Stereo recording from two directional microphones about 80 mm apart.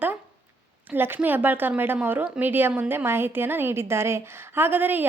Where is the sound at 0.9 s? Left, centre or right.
Right.